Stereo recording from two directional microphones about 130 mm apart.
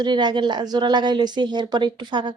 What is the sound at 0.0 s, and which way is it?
A woman's voice, 35° right (ahead or behind).